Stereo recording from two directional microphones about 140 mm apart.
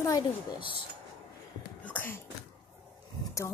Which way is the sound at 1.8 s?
10° left (ahead or behind).